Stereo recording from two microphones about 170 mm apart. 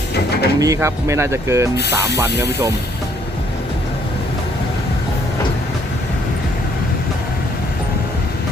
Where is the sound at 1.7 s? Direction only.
80° left.